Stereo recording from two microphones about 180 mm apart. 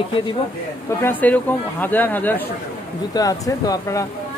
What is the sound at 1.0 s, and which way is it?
Speech, 10° left (ahead or behind).